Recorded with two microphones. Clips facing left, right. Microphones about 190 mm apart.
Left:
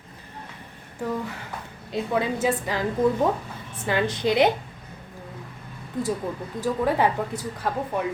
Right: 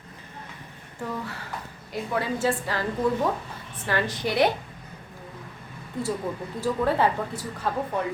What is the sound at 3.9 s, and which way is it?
Speech, 20° left (ahead or behind).